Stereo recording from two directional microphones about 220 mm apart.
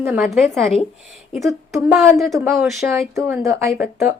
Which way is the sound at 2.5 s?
Centre (ahead or behind).